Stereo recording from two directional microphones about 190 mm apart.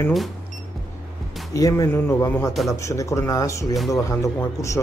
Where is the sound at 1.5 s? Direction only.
15° left (ahead or behind).